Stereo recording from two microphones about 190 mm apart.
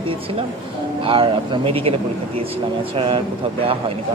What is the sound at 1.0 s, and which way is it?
Speech, 30° right (ahead or behind).